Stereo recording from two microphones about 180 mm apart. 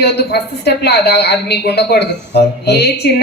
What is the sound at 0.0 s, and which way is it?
A woman's voice, 65° left (ahead or behind).